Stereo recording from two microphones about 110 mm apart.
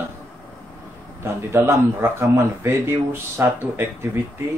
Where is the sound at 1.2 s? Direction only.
20° right (ahead or behind).